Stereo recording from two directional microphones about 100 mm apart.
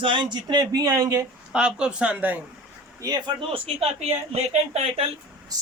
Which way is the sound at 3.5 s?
70° right (ahead or behind).